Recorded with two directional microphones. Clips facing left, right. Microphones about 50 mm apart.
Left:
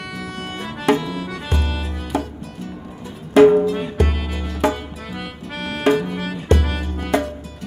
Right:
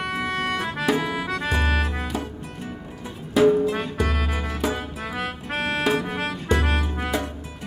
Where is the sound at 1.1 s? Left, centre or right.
Right.